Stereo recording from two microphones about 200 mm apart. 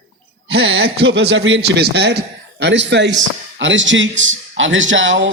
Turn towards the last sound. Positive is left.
turn(degrees=-70)  # may be behind; listen again after turning